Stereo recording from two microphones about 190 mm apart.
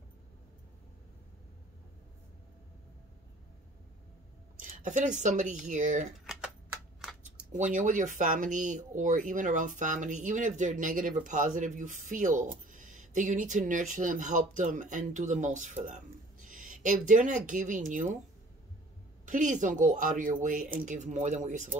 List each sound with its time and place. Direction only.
4.6 s speech: 40° right (ahead or behind)
7.0 s a sound: centre (ahead or behind)
7.5 s speech: 40° right (ahead or behind)
19.2 s a woman's voice: 40° right (ahead or behind)